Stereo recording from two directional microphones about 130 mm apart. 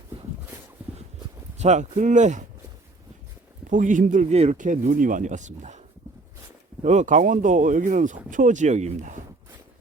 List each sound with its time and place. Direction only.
1.5 s speech: 65° right (ahead or behind)
3.7 s speech: 80° right
6.8 s speech: 65° right (ahead or behind)